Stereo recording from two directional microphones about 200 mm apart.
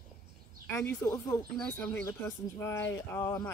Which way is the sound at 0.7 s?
10° left (ahead or behind).